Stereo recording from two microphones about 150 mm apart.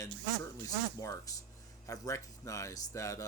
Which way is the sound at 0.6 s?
20° left (ahead or behind).